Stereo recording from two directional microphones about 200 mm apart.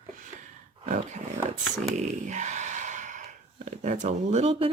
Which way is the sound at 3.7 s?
35° right (ahead or behind).